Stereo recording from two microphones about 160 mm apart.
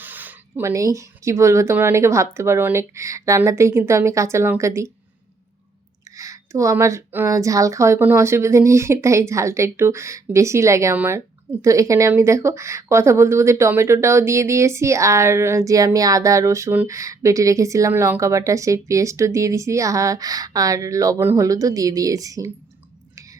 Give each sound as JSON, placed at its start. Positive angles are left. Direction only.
{"t": 0.0, "sound": "speech", "side_deg": -10}
{"t": 6.1, "sound": "speech", "side_deg": -20}